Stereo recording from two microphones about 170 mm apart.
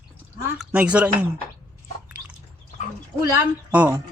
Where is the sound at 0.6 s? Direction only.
5° right (ahead or behind).